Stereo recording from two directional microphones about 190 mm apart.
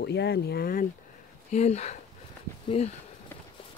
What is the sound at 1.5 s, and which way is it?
Speech, 35° left (ahead or behind).